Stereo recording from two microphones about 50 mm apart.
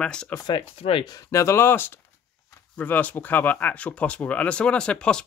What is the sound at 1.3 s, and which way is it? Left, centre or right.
Speech, left.